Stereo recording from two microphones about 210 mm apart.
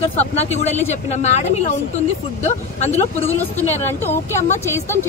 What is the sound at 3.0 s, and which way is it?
Speech, 30° left (ahead or behind).